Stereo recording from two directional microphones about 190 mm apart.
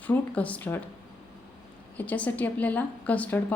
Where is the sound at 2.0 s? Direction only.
10° left (ahead or behind).